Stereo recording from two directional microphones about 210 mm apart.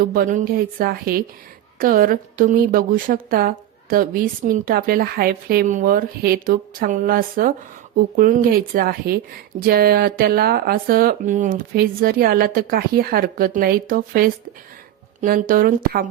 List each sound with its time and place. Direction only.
0.0 s a woman's voice: 40° right (ahead or behind)